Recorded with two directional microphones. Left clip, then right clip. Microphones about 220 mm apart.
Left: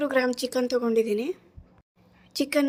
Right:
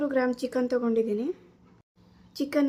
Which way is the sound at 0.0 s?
40° left (ahead or behind).